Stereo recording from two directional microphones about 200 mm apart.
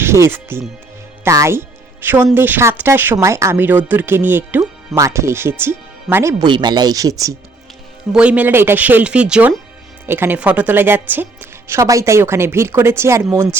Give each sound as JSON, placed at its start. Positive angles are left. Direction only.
{"t": 0.0, "sound": "speech", "side_deg": -10}
{"t": 1.2, "sound": "music", "side_deg": -15}
{"t": 2.3, "sound": "speech", "side_deg": -10}
{"t": 6.4, "sound": "speech", "side_deg": -20}
{"t": 8.1, "sound": "speech", "side_deg": -5}